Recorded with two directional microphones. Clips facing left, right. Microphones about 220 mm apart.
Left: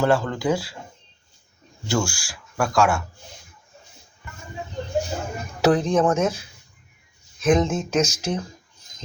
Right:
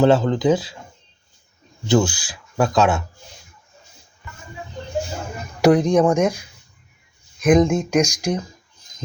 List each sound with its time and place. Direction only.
0.0 s speech: 20° right (ahead or behind)
1.9 s speech: 20° right (ahead or behind)
5.6 s speech: 15° right (ahead or behind)
7.4 s speech: 15° right (ahead or behind)